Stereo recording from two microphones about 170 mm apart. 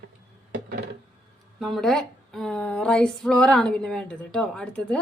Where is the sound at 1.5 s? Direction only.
Centre (ahead or behind).